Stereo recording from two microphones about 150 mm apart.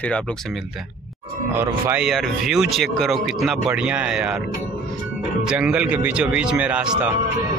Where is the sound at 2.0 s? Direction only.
Centre (ahead or behind).